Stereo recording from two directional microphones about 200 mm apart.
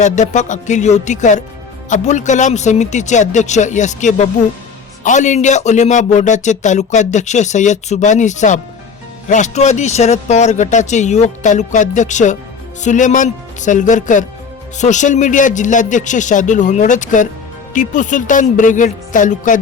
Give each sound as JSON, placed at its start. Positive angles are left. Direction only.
{"t": 0.0, "sound": "speech", "side_deg": 35}